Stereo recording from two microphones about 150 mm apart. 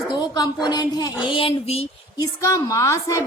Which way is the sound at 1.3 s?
40° left (ahead or behind).